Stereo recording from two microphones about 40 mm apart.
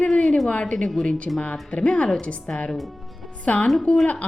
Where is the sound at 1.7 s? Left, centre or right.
Left.